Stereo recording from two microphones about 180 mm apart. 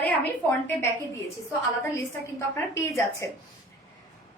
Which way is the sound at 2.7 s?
15° left (ahead or behind).